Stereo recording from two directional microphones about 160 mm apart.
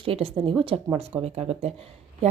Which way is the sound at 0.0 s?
35° right (ahead or behind).